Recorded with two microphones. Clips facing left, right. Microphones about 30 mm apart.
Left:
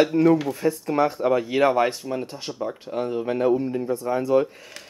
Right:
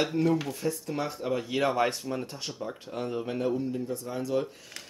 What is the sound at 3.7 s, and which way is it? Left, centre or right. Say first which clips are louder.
Speech: left 8 dB; left.